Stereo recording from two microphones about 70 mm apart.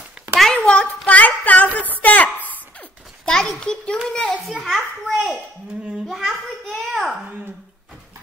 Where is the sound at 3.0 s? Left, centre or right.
Centre.